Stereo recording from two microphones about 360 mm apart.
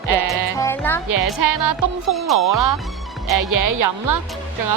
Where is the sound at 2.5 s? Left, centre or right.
Right.